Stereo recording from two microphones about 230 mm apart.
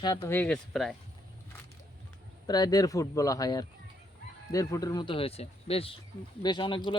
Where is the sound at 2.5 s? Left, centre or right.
Centre.